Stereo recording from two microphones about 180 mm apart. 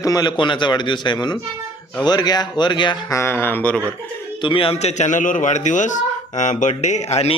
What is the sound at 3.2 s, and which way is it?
Speech, 10° left (ahead or behind).